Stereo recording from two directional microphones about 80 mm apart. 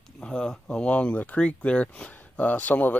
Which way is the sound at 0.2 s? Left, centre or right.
Centre.